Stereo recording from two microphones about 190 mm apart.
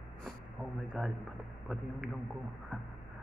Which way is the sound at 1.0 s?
Centre (ahead or behind).